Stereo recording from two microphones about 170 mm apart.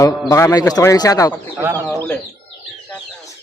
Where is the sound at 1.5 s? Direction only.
15° right (ahead or behind).